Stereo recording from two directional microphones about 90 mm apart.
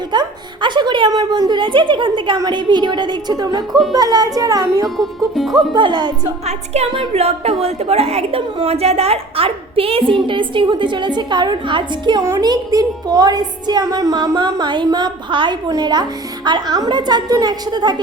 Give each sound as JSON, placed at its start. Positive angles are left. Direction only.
{"t": 0.1, "sound": "a woman's voice", "side_deg": -60}
{"t": 3.7, "sound": "music", "side_deg": 0}
{"t": 3.9, "sound": "a woman's voice", "side_deg": -50}
{"t": 4.9, "sound": "music", "side_deg": 0}
{"t": 5.5, "sound": "a woman's voice", "side_deg": -60}
{"t": 6.9, "sound": "a woman's voice", "side_deg": -90}
{"t": 12.2, "sound": "a woman's voice", "side_deg": -40}
{"t": 14.8, "sound": "a woman's voice", "side_deg": -45}
{"t": 15.3, "sound": "a woman's voice", "side_deg": -65}
{"t": 15.7, "sound": "a woman's voice", "side_deg": -50}